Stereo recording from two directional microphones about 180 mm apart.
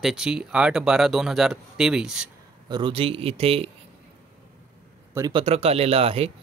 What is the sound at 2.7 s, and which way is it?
A man's voice, 30° right (ahead or behind).